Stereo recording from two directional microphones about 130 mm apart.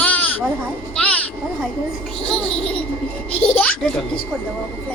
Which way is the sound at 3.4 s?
10° left (ahead or behind).